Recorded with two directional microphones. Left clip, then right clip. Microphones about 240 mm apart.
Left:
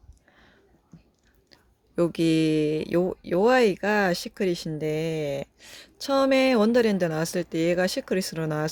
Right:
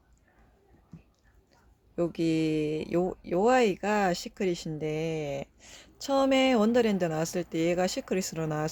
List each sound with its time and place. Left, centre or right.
2.0 s speech: left